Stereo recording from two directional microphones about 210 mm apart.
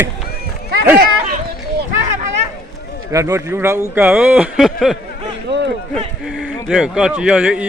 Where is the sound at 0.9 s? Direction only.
45° right (ahead or behind).